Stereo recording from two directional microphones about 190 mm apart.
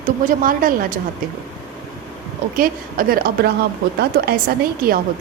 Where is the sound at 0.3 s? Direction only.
45° right (ahead or behind).